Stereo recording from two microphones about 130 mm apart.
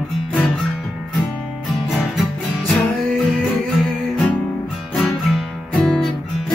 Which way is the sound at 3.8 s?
5° left (ahead or behind).